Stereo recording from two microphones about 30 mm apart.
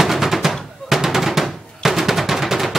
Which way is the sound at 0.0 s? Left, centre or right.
Centre.